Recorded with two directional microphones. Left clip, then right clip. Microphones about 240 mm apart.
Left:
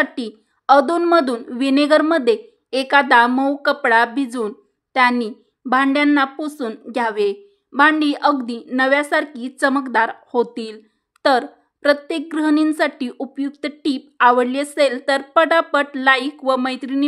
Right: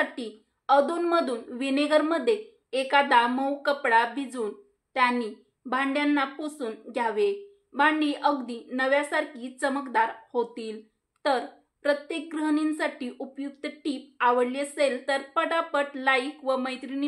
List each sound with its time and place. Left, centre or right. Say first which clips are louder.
0.0 s speech: left 8 dB; left